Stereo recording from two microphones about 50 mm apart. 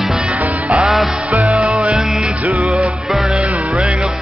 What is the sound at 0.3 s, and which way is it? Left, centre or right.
Music, right.